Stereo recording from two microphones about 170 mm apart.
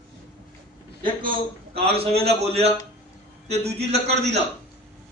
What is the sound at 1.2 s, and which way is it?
A man's voice, 30° right (ahead or behind).